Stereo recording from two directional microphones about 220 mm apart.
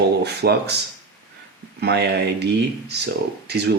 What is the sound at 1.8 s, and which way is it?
Speech, 50° right (ahead or behind).